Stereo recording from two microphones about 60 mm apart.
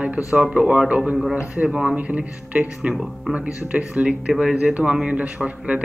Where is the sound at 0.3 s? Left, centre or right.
Right.